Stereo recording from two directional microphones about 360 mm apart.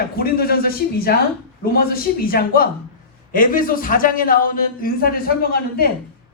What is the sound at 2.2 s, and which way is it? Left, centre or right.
A man's voice, left.